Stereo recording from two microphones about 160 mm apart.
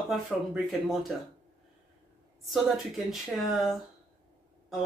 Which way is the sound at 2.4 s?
Centre (ahead or behind).